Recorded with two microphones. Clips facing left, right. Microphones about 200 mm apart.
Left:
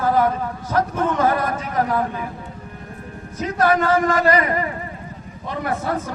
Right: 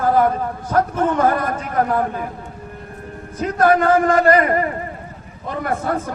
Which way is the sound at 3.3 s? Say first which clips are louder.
Right 3 dB; 50° right (ahead or behind).